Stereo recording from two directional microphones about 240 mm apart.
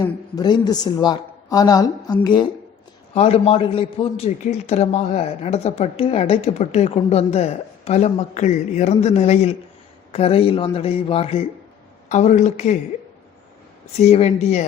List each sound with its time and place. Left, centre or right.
0.0 s a man's voice: centre
14.0 s a man's voice: left